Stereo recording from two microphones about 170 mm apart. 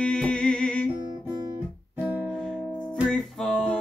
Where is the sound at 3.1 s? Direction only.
5° left (ahead or behind).